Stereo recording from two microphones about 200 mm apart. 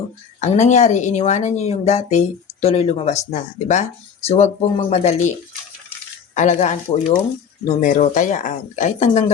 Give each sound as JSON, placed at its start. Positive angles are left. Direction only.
{"t": 0.3, "sound": "speech", "side_deg": 35}
{"t": 4.3, "sound": "speech", "side_deg": 35}
{"t": 6.3, "sound": "speech", "side_deg": 35}